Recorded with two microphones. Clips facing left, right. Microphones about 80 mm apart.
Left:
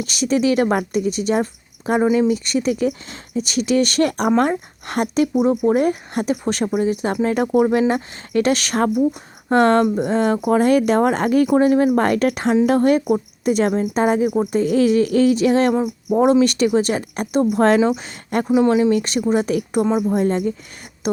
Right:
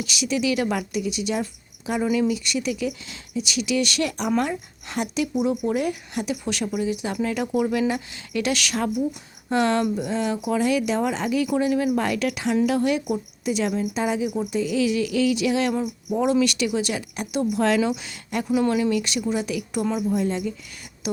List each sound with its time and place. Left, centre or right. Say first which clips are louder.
0.0 s speech: left 6 dB; left
15.7 s a sound: left 6 dB; left
16.1 s speech: left 6 dB; left
18.5 s speech: left 6 dB; left